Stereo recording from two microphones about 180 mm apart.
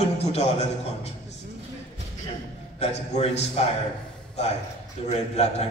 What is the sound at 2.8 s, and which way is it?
Speech, 35° left (ahead or behind).